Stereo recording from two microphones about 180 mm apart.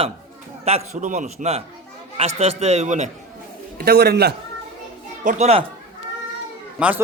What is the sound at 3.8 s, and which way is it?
Speech, 60° right (ahead or behind).